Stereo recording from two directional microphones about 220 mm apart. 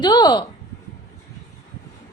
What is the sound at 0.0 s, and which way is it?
Speech, 20° left (ahead or behind).